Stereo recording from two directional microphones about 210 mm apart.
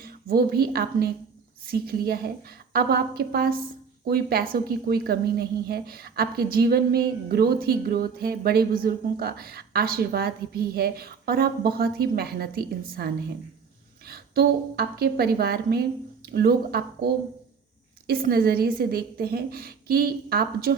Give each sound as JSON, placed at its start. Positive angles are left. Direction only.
{"t": 0.0, "sound": "a woman's voice", "side_deg": -45}